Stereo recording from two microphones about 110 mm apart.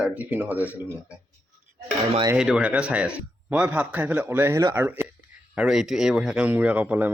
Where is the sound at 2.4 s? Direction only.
5° right (ahead or behind).